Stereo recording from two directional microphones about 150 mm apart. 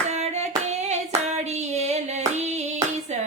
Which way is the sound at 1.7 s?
50° right (ahead or behind).